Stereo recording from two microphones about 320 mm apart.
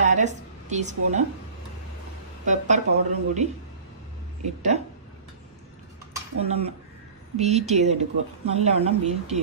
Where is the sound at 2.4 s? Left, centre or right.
Right.